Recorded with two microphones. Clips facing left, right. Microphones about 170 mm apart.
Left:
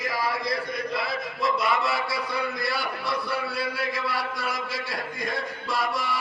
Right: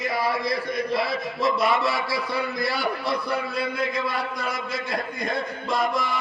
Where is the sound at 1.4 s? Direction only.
25° right (ahead or behind).